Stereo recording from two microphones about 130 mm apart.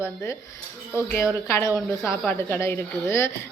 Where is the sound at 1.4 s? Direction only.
20° left (ahead or behind).